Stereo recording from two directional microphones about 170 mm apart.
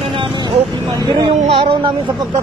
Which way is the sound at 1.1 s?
30° right (ahead or behind).